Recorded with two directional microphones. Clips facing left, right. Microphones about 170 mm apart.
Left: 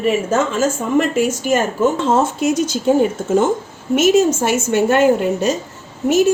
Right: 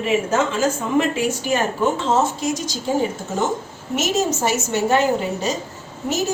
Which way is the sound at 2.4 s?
60° left (ahead or behind).